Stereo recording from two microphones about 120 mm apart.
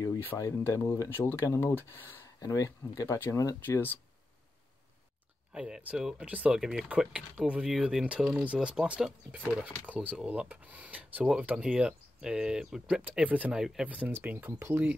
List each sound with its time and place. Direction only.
0.0 s speech: 20° left (ahead or behind)
2.5 s speech: 30° left (ahead or behind)
5.5 s speech: 10° right (ahead or behind)